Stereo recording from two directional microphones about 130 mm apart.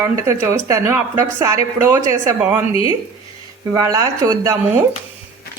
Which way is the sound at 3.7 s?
25° right (ahead or behind).